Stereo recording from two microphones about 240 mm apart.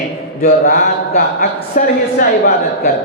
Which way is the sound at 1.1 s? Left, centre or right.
Left.